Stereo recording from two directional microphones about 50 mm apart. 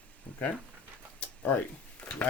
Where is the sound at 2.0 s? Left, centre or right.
Left.